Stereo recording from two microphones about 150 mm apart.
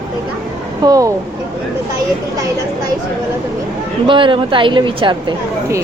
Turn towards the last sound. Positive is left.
turn(degrees=-35)  # may be behind; listen again after turning